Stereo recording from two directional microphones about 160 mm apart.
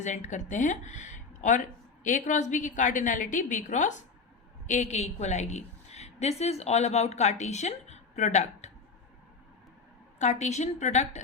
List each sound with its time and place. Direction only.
0.0 s a woman's voice: 50° left (ahead or behind)
10.2 s a woman's voice: 45° left (ahead or behind)